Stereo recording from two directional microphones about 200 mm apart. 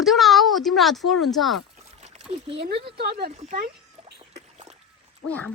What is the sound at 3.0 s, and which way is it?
Speech, 50° right (ahead or behind).